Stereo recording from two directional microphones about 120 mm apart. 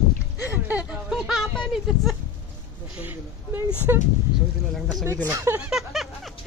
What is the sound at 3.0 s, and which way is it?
Speech, 15° right (ahead or behind).